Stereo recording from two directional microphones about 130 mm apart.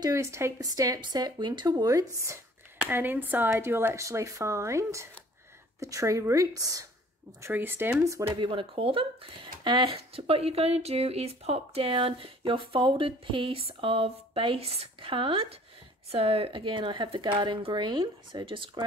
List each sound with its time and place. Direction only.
0.0 s speech: 25° right (ahead or behind)
2.8 s speech: 15° right (ahead or behind)
7.4 s speech: 15° right (ahead or behind)
8.4 s speech: 40° right (ahead or behind)